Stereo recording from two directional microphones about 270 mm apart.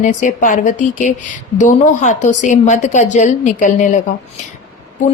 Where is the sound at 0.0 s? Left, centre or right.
Left.